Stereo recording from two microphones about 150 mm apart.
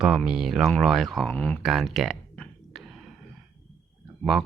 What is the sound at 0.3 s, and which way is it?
Speech, centre (ahead or behind).